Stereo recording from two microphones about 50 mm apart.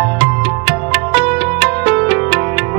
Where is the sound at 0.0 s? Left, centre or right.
Right.